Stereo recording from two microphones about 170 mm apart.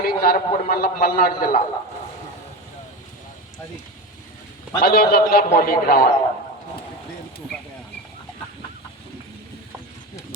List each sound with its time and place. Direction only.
0.0 s a man's voice: 60° left (ahead or behind)
4.8 s a man's voice: 60° left (ahead or behind)